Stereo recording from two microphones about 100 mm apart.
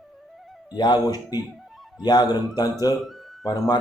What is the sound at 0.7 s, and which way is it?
Speech, 45° left (ahead or behind).